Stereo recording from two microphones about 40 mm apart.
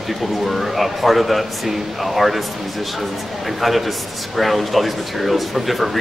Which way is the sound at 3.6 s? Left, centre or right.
Centre.